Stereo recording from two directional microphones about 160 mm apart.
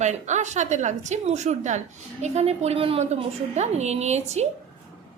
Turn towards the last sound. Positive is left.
turn(degrees=-45)  # may be behind; listen again after turning